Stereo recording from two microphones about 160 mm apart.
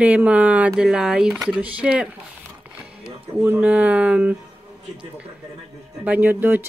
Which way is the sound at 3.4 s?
10° right (ahead or behind).